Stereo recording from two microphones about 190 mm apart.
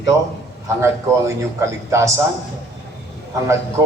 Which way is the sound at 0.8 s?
15° right (ahead or behind).